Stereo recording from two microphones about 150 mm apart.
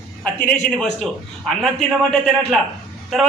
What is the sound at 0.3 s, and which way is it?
A man's voice, 10° left (ahead or behind).